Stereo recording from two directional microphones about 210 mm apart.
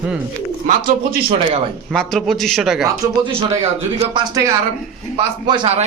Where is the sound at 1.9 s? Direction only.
Centre (ahead or behind).